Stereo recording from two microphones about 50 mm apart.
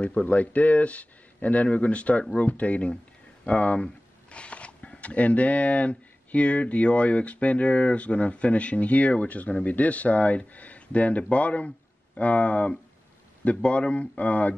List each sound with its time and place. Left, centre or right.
0.2 s speech: left